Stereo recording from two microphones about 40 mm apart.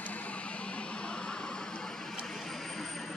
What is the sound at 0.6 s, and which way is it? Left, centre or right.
Music, left.